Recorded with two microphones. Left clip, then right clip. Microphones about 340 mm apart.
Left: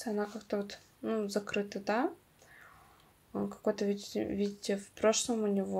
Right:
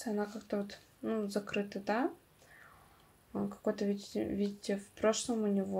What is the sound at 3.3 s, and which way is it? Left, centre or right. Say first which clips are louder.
Speech: left 2 dB; centre.